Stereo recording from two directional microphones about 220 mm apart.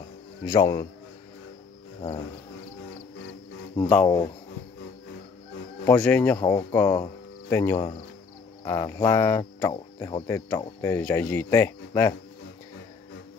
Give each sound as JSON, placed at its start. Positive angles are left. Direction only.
{"t": 0.5, "sound": "cricket", "side_deg": 15}
{"t": 3.7, "sound": "cricket", "side_deg": 5}
{"t": 5.9, "sound": "cricket", "side_deg": 5}
{"t": 6.4, "sound": "speech", "side_deg": 10}
{"t": 8.6, "sound": "cricket", "side_deg": 15}